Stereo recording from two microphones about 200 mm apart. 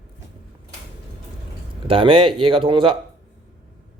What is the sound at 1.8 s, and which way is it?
Speech, 25° right (ahead or behind).